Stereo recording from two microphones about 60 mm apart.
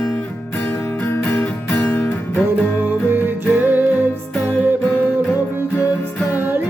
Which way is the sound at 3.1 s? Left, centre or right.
Right.